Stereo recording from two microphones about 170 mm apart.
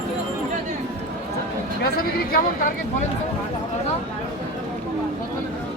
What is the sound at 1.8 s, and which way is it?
Speech, 60° left (ahead or behind).